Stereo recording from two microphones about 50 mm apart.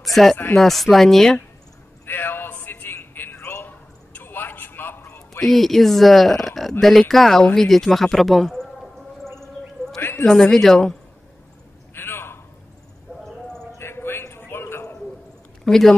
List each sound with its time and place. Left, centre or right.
0.0 s music: centre
0.6 s speech: centre
2.0 s a sound: left
5.4 s speech: centre
9.2 s a sound: centre
10.6 s speech: centre
11.9 s a sound: left
13.7 s music: left
15.6 s speech: centre